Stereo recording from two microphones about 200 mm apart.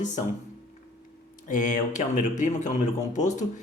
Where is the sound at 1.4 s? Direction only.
40° left (ahead or behind).